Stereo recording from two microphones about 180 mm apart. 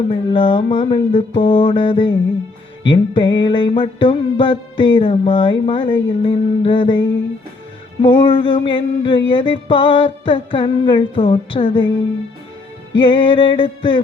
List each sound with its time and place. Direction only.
0.1 s music: 30° left (ahead or behind)
13.0 s music: 30° left (ahead or behind)